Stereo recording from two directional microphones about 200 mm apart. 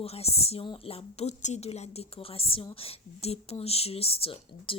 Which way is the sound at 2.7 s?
30° left (ahead or behind).